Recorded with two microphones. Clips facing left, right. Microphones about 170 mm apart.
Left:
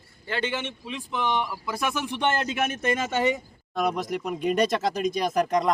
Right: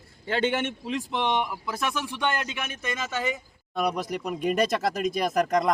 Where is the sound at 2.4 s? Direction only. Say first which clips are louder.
Left 6 dB; 40° left (ahead or behind); by 3.3 s 55° left (ahead or behind).